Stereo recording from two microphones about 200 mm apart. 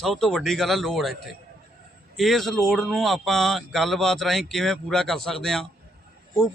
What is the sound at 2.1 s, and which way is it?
A man's voice, centre (ahead or behind).